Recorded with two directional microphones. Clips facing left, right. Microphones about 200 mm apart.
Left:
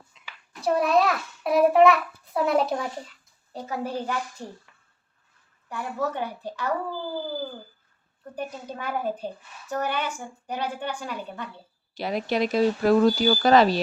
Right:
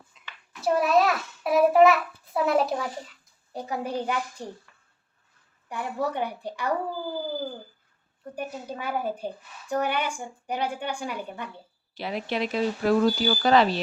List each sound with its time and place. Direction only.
0.6 s a child's voice: centre (ahead or behind)
3.5 s a woman's voice: 15° right (ahead or behind)
5.6 s a woman's voice: 15° right (ahead or behind)
8.4 s a woman's voice: 10° right (ahead or behind)
11.9 s speech: 40° left (ahead or behind)